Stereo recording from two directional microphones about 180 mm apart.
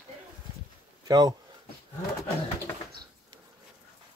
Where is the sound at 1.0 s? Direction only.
20° right (ahead or behind).